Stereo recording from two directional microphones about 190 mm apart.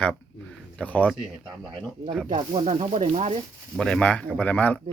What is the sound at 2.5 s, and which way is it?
Speech, 30° right (ahead or behind).